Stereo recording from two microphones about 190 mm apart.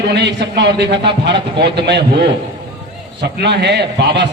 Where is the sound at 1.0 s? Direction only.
25° right (ahead or behind).